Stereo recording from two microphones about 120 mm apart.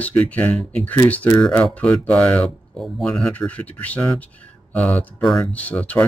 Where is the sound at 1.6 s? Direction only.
10° left (ahead or behind).